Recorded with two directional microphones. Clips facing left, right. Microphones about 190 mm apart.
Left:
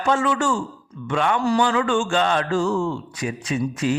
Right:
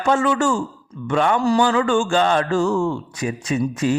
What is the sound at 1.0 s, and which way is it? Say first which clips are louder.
Mantra: right 3 dB; 40° right (ahead or behind).